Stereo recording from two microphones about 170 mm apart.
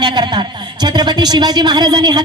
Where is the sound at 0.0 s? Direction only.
25° right (ahead or behind).